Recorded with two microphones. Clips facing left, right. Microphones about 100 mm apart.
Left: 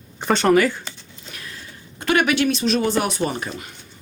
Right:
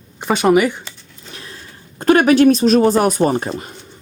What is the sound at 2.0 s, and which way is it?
Speech, 40° right (ahead or behind).